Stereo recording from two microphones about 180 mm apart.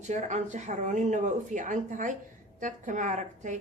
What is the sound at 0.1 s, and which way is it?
A woman's voice, 40° right (ahead or behind).